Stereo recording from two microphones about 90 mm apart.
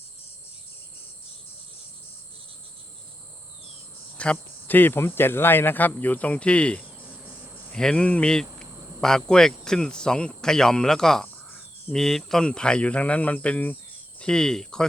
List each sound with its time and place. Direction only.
4.2 s cricket: 15° left (ahead or behind)
5.9 s speech: 20° left (ahead or behind)
6.8 s cricket: 15° right (ahead or behind)
7.7 s speech: 5° left (ahead or behind)